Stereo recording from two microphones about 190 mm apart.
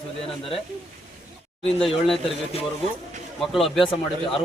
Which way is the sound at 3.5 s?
Centre (ahead or behind).